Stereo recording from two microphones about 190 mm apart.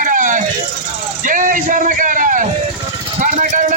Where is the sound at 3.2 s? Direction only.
40° right (ahead or behind).